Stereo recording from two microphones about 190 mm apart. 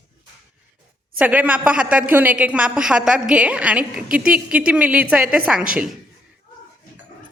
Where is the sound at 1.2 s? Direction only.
10° right (ahead or behind).